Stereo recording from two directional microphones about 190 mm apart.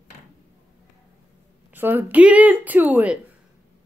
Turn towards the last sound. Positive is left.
turn(degrees=-10)  # may be behind; listen again after turning